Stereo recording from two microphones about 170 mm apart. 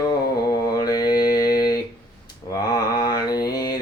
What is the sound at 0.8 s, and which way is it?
Mantra, 25° left (ahead or behind).